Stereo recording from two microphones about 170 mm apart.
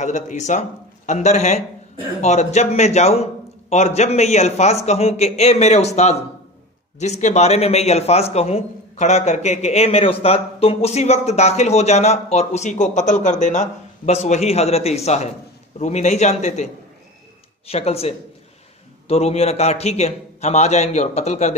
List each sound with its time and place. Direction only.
0.0 s a man's voice: 45° left (ahead or behind)
17.6 s a man's voice: 35° left (ahead or behind)